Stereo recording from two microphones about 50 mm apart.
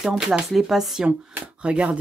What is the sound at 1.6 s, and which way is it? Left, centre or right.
Speech, right.